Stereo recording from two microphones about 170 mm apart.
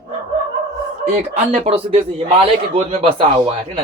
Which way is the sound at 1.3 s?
35° right (ahead or behind).